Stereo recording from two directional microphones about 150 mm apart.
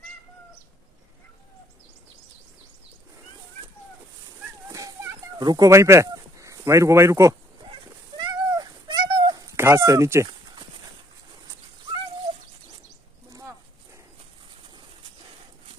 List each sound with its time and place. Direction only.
4.6 s children playing: 20° right (ahead or behind)
7.7 s a sound: 30° right (ahead or behind)
13.3 s dog: 20° right (ahead or behind)